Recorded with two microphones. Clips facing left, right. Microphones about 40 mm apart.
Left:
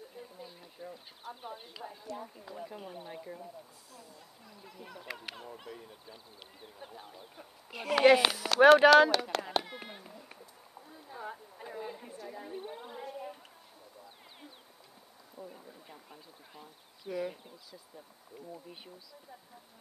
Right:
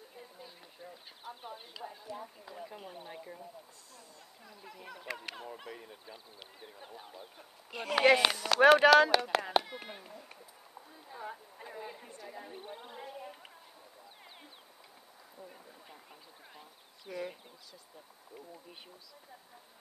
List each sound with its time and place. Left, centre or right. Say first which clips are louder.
0.1 s a woman's voice: left 3 dB; centre
4.5 s speech: right 1 dB; centre
10.9 s a sound: left 1 dB; centre
12.2 s a woman's voice: left 4 dB; centre
15.4 s speech: left 3 dB; centre